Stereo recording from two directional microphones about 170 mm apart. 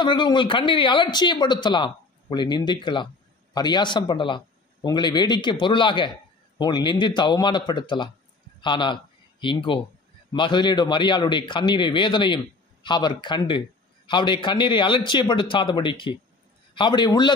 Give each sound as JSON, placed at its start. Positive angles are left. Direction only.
{"t": 0.0, "sound": "a man's voice", "side_deg": 25}